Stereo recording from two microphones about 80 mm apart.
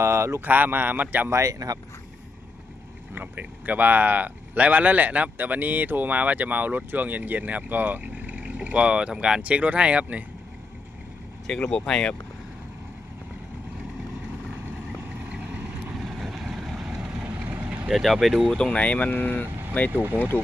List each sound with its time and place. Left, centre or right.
0.0 s speech: right
0.5 s speech: right
1.3 s speech: right
3.2 s speech: right
11.4 s speech: centre
16.0 s vehicle: centre
17.4 s vehicle: centre
17.8 s speech: centre
18.5 s speech: centre
19.9 s speech: right
20.1 s speech: left